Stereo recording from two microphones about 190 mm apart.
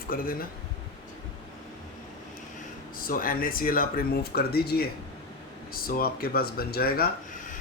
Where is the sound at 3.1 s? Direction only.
50° left (ahead or behind).